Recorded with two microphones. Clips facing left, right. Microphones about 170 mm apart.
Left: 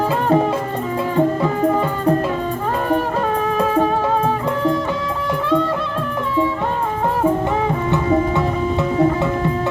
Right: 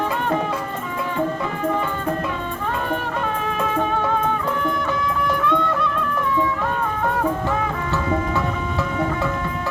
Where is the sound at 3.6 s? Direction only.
35° left (ahead or behind).